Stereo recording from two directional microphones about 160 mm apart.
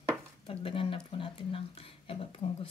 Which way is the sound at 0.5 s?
35° left (ahead or behind).